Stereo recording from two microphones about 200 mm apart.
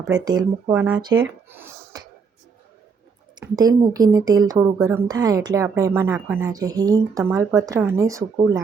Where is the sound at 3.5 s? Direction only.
20° right (ahead or behind).